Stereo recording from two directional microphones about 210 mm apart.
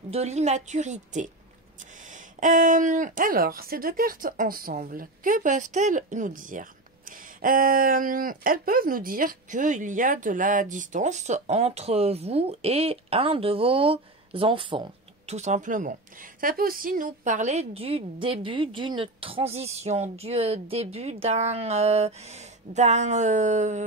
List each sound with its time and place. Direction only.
0.1 s speech: 30° right (ahead or behind)
2.4 s speech: 40° right (ahead or behind)